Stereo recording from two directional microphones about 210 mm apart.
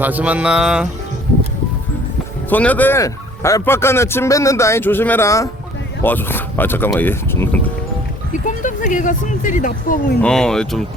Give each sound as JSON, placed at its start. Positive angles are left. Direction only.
{"t": 0.0, "sound": "mantra", "side_deg": -5}
{"t": 2.5, "sound": "a man's voice", "side_deg": 5}
{"t": 8.3, "sound": "speech", "side_deg": 40}
{"t": 10.2, "sound": "mantra", "side_deg": 5}